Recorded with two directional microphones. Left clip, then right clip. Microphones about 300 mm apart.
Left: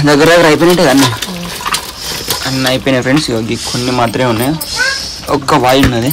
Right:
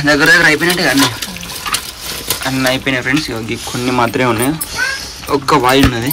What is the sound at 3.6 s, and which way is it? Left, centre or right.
Speech, centre.